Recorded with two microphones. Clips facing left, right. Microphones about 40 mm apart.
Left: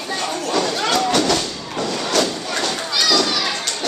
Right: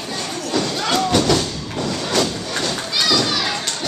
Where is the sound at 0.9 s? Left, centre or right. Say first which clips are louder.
Right 2 dB; centre.